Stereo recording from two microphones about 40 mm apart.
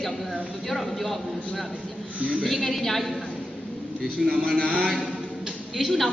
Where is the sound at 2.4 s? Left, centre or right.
Centre.